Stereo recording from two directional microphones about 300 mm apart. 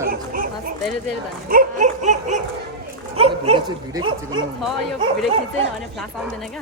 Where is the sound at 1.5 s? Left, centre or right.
Right.